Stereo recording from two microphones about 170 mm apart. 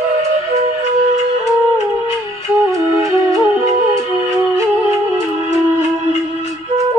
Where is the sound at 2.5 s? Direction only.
20° right (ahead or behind).